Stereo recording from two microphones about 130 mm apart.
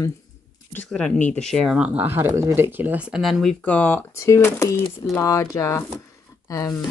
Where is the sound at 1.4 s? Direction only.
5° left (ahead or behind).